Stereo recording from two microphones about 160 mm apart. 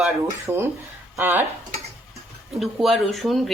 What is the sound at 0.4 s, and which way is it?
Speech, 15° right (ahead or behind).